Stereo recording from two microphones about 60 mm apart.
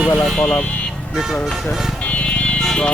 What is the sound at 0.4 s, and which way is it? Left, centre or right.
Speech, left.